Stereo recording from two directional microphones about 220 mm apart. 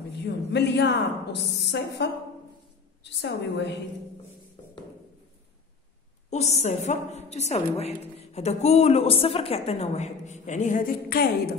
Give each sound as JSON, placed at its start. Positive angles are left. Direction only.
{"t": 0.2, "sound": "a woman's voice", "side_deg": 50}
{"t": 6.3, "sound": "a woman's voice", "side_deg": 30}